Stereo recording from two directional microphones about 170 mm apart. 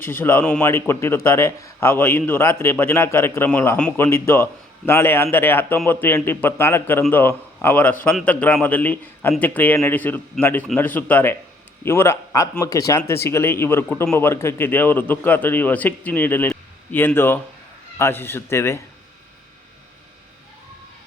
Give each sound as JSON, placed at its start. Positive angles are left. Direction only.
{"t": 0.0, "sound": "speech", "side_deg": 10}